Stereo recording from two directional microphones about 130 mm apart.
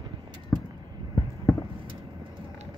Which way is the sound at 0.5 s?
25° left (ahead or behind).